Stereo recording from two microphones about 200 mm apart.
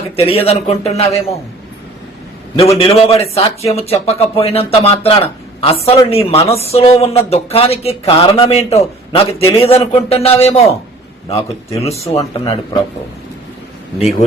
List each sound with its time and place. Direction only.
0.2 s a man's voice: 30° left (ahead or behind)
2.6 s a woman's voice: 30° left (ahead or behind)